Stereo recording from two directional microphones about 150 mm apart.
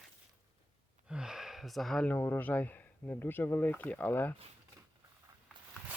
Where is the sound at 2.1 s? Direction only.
15° left (ahead or behind).